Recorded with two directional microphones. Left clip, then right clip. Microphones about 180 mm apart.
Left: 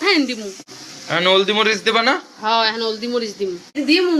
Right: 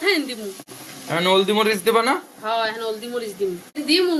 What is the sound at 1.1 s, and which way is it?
Speech, 5° right (ahead or behind).